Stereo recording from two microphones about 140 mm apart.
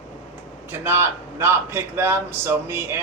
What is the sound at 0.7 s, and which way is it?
Speech, 15° right (ahead or behind).